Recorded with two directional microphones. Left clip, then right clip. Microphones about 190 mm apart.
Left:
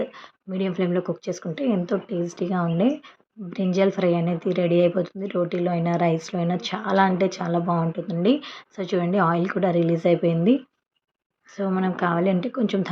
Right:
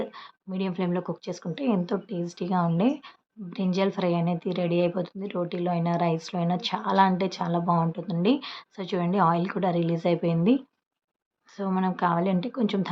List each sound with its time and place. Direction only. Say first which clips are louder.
0.0 s a woman's voice: left 4 dB; 15° left (ahead or behind)